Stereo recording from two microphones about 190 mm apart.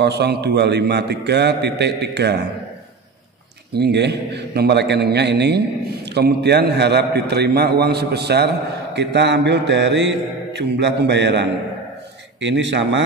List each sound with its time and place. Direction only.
0.0 s mantra: 60° right (ahead or behind)
3.7 s mantra: 60° right (ahead or behind)
12.4 s speech: 70° right (ahead or behind)